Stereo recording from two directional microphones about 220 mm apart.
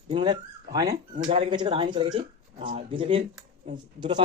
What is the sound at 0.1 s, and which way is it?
Speech, 20° right (ahead or behind).